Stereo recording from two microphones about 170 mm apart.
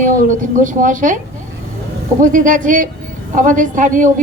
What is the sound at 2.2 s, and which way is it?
A woman's voice, 50° right (ahead or behind).